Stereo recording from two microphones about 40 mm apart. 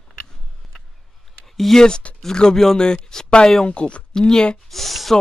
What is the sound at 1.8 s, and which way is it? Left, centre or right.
Speech, left.